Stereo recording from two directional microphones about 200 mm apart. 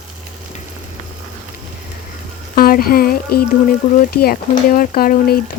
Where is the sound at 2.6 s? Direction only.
45° left (ahead or behind).